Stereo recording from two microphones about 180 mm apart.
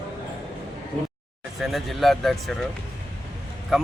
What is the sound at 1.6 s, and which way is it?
Speech, centre (ahead or behind).